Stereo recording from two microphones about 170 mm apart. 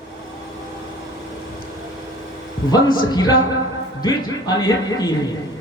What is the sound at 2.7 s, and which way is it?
Speech, 25° left (ahead or behind).